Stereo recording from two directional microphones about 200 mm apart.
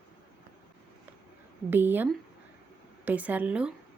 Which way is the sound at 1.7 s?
10° right (ahead or behind).